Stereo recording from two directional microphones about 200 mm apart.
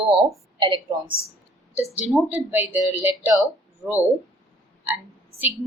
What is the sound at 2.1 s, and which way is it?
Speech, 10° right (ahead or behind).